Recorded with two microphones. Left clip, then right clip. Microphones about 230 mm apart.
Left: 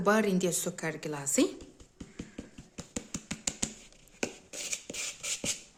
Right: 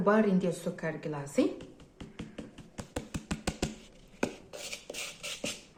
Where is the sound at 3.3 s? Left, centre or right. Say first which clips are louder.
Right 1 dB; centre.